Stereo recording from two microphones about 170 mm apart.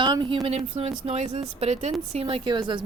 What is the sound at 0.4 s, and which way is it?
A woman's voice, 40° right (ahead or behind).